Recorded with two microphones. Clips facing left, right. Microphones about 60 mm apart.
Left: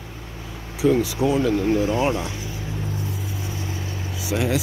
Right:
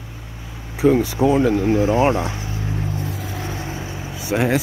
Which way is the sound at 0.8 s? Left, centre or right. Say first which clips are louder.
Right 3 dB; right.